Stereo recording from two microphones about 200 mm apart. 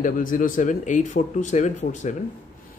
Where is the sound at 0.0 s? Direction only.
40° left (ahead or behind).